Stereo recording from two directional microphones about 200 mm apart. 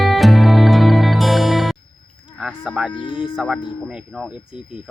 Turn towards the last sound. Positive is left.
turn(degrees=0)  # may be behind; listen again after turning